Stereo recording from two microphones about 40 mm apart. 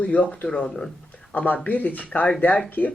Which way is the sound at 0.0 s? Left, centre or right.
Left.